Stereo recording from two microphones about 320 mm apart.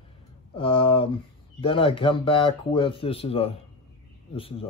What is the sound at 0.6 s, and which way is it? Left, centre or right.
Speech, centre.